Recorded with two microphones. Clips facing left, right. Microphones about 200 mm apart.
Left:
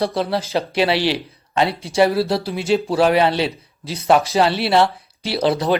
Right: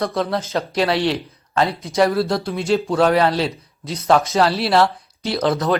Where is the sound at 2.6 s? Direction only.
Centre (ahead or behind).